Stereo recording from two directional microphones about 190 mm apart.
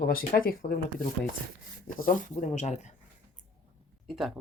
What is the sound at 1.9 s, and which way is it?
Speech, 45° left (ahead or behind).